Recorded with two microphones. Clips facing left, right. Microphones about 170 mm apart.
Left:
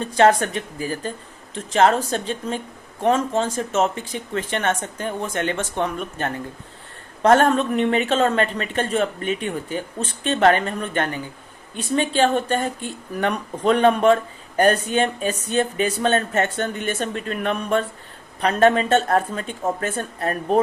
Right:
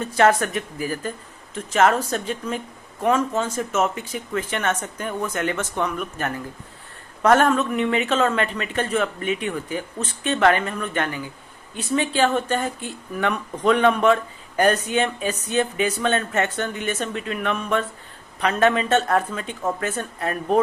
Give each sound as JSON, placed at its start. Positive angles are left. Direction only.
{"t": 0.2, "sound": "speech", "side_deg": 30}
{"t": 13.1, "sound": "speech", "side_deg": 40}